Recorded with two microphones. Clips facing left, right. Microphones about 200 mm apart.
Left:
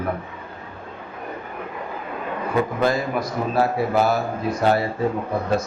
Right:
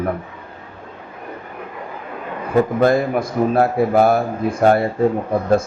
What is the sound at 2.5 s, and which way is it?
A man's voice, 50° right (ahead or behind).